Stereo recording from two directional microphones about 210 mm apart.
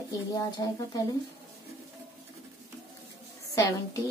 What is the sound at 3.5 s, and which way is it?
Speech, 15° left (ahead or behind).